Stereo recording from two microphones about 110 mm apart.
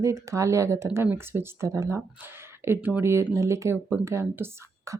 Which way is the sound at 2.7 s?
15° right (ahead or behind).